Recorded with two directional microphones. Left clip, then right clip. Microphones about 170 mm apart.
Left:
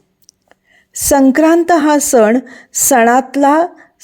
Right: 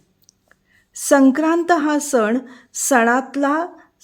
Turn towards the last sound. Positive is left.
turn(degrees=30)  # may be behind; listen again after turning